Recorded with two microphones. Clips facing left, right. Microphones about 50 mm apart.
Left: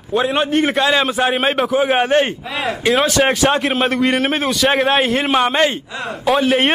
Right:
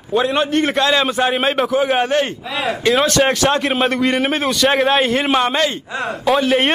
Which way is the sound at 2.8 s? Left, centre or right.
Centre.